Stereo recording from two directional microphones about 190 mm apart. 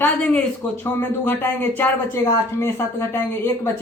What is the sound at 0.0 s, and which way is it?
Speech, 5° left (ahead or behind).